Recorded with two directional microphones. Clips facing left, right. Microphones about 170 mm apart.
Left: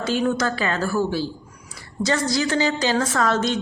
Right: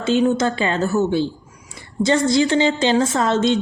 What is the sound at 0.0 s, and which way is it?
A woman's voice, 25° right (ahead or behind).